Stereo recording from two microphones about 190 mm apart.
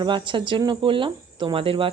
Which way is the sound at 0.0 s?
25° right (ahead or behind).